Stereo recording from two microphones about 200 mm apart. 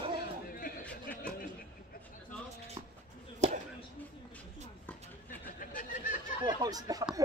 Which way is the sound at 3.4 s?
35° right (ahead or behind).